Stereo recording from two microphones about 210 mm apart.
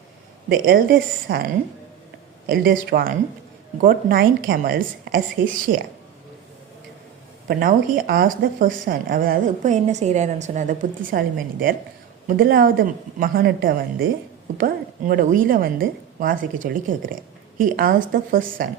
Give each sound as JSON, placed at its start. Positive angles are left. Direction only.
{"t": 0.4, "sound": "a woman's voice", "side_deg": -45}
{"t": 2.5, "sound": "a woman's voice", "side_deg": -45}
{"t": 7.4, "sound": "speech", "side_deg": -45}
{"t": 12.3, "sound": "a woman's voice", "side_deg": -45}